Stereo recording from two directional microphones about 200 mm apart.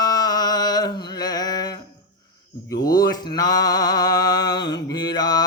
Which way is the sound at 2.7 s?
50° left (ahead or behind).